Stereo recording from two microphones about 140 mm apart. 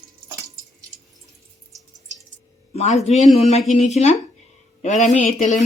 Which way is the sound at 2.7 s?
50° left (ahead or behind).